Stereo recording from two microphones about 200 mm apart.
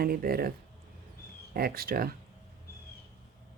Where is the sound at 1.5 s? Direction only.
50° right (ahead or behind).